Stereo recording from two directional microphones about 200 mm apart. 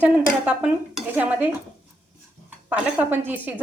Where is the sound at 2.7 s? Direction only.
10° right (ahead or behind).